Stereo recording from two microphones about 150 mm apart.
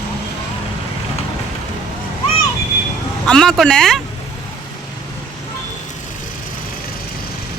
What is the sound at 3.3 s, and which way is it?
Speech, 5° left (ahead or behind).